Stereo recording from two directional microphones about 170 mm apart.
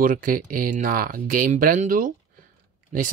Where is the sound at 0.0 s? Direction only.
55° right (ahead or behind).